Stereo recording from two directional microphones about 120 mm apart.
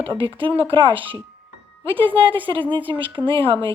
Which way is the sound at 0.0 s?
45° right (ahead or behind).